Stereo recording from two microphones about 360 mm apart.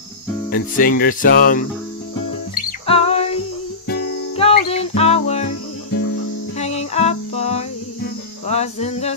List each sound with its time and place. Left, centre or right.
0.5 s music: left
6.6 s music: centre